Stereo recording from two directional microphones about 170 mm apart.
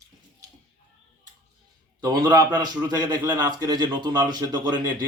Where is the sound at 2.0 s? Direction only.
25° right (ahead or behind).